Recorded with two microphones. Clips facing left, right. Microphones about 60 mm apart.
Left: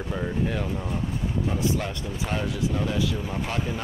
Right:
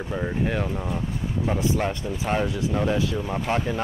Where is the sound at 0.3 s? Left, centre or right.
Right.